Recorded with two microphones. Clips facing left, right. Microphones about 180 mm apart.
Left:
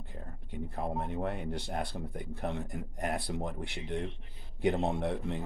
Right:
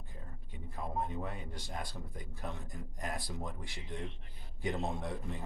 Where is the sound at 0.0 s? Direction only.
65° left (ahead or behind).